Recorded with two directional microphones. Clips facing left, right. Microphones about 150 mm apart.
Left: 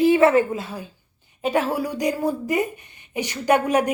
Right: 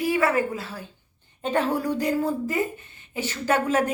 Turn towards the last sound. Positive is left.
turn(degrees=15)  # may be behind; listen again after turning